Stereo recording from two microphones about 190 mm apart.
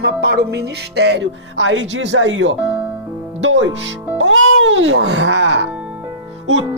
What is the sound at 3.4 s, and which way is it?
Speech, 75° right (ahead or behind).